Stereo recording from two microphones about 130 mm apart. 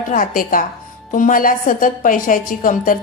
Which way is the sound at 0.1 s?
90° left.